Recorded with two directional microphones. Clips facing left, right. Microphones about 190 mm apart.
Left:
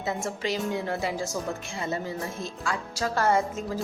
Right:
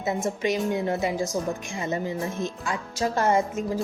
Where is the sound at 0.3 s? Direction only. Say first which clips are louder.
Right 5 dB; 20° right (ahead or behind).